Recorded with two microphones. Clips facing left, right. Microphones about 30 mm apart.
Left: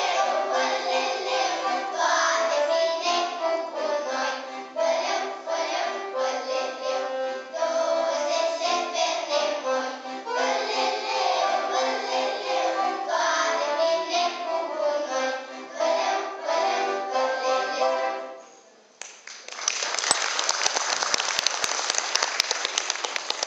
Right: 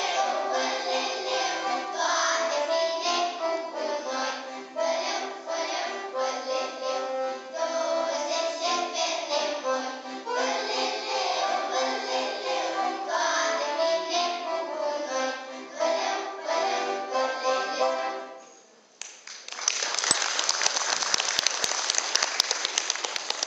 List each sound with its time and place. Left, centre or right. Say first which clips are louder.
0.0 s music: left 3 dB; centre
7.1 s music: left 1 dB; centre
7.5 s music: left 4 dB; centre
20.3 s applause: left 2 dB; centre